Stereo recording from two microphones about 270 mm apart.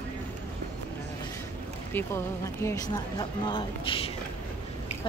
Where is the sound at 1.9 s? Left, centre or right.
Centre.